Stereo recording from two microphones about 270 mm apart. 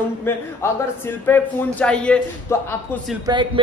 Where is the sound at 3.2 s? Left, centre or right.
Centre.